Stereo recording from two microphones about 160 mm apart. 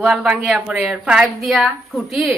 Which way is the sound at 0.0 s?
5° right (ahead or behind).